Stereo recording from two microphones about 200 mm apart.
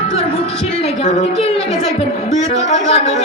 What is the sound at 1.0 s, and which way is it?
Speech, 35° left (ahead or behind).